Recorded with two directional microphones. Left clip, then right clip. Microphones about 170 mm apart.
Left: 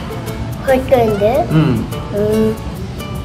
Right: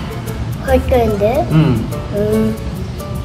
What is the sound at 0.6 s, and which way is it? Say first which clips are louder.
Speech: left 2 dB; 15° left (ahead or behind).